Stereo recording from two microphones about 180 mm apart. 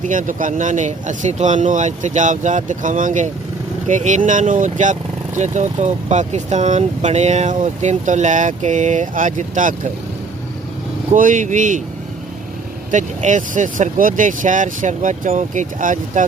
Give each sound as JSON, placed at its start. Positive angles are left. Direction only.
{"t": 0.0, "sound": "speech", "side_deg": -45}
{"t": 11.1, "sound": "speech", "side_deg": -45}
{"t": 12.9, "sound": "speech", "side_deg": -45}